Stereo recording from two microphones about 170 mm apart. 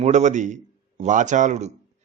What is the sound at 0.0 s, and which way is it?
A man's voice, 45° right (ahead or behind).